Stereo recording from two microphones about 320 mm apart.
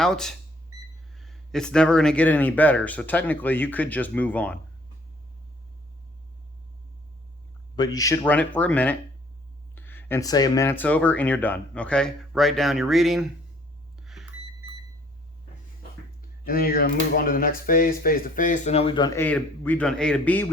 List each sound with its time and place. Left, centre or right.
0.0 s speech: centre
7.8 s speech: centre
14.0 s beep: centre
16.5 s speech: left; by 20.5 s centre